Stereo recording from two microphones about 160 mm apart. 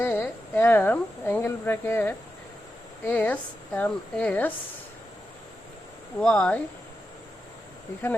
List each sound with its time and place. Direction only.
0.0 s speech: 10° left (ahead or behind)
6.1 s speech: 10° left (ahead or behind)